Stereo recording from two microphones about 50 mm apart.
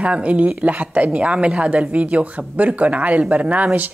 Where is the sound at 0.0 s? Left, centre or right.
Right.